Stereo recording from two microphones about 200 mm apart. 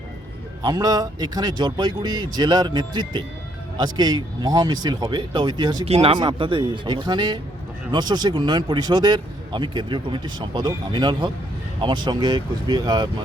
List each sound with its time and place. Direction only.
0.6 s a man's voice: 20° right (ahead or behind)